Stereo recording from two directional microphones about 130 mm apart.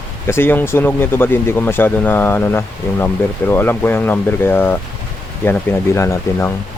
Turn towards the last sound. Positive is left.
turn(degrees=20)  # may be behind; listen again after turning